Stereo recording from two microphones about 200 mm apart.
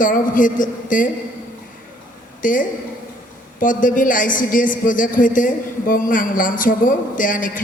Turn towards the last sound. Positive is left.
turn(degrees=40)  # may be behind; listen again after turning